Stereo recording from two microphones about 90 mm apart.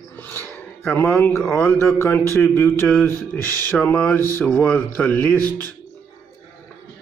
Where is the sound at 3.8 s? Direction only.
10° left (ahead or behind).